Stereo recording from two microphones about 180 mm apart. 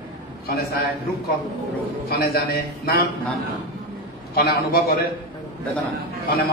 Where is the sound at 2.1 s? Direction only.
60° left (ahead or behind).